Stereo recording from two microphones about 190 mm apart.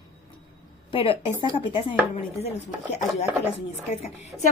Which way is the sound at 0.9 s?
30° left (ahead or behind).